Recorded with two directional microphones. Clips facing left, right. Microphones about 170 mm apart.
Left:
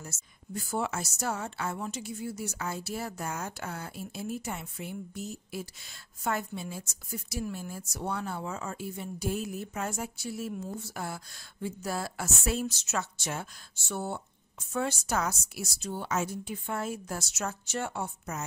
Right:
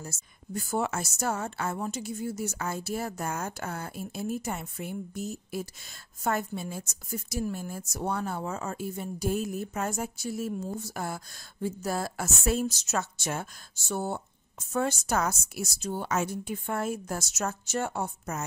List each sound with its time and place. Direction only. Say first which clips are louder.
0.0 s a woman's voice: right 3 dB; 40° right (ahead or behind)